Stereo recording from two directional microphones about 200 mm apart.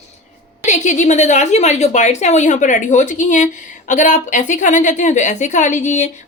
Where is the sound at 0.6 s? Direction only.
35° left (ahead or behind).